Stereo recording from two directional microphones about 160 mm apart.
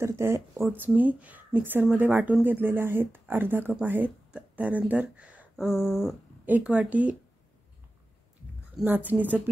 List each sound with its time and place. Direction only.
0.0 s speech: 15° right (ahead or behind)
8.7 s speech: 10° right (ahead or behind)